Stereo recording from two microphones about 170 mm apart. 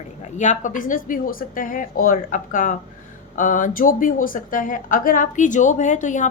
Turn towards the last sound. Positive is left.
turn(degrees=45)  # may be behind; listen again after turning